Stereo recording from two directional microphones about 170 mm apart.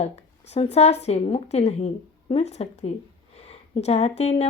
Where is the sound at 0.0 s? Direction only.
40° left (ahead or behind).